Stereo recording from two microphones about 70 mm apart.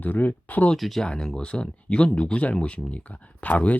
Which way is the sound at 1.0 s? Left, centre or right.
Centre.